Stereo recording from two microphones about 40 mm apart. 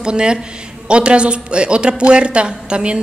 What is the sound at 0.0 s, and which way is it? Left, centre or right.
A woman's voice, right.